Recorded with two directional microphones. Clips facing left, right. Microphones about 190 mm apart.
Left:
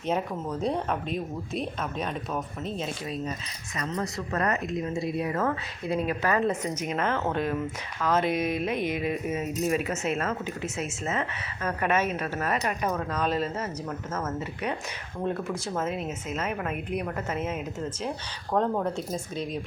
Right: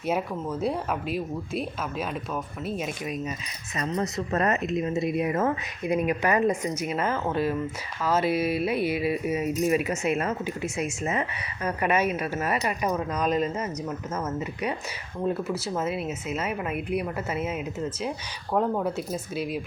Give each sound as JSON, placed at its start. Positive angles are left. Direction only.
{"t": 0.1, "sound": "speech", "side_deg": -5}
{"t": 3.8, "sound": "speech", "side_deg": -25}